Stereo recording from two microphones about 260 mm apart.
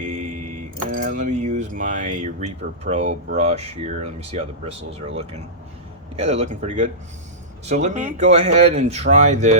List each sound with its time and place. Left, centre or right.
0.9 s speech: right